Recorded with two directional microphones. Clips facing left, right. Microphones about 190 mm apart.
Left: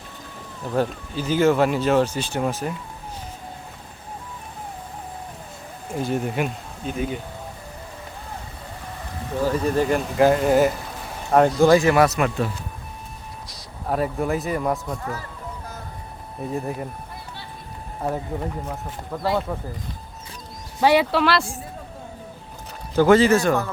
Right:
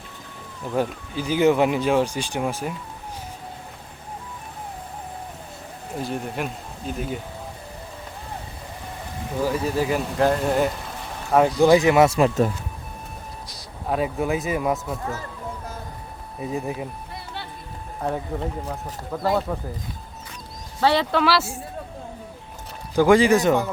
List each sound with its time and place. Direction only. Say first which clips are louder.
0.8 s speech: left 1 dB; 10° right (ahead or behind)
5.9 s speech: left 4 dB; centre (ahead or behind)
9.5 s speech: left 3 dB; 5° right (ahead or behind)
11.6 s speech: right 2 dB; 15° right (ahead or behind)
13.5 s a man's voice: even; centre (ahead or behind)
16.4 s speech: even; 5° right (ahead or behind)
18.0 s speech: even; 5° left (ahead or behind)
20.8 s speech: left 2 dB; 10° left (ahead or behind); by 21.6 s 5° right (ahead or behind)
23.0 s speech: left 1 dB; 15° right (ahead or behind)